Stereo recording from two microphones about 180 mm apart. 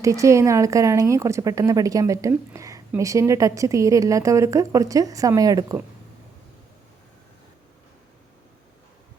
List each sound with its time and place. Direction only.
0.0 s a woman's voice: 15° right (ahead or behind)